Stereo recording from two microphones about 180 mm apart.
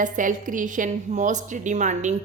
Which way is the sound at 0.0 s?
45° right (ahead or behind).